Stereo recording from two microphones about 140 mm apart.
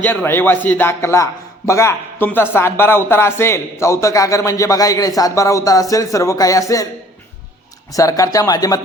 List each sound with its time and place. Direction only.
0.0 s a man's voice: 15° left (ahead or behind)
7.9 s a man's voice: 25° left (ahead or behind)